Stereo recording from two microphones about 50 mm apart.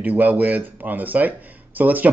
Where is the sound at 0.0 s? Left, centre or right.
Right.